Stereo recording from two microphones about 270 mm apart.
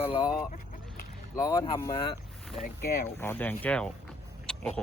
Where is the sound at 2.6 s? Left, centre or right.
Left.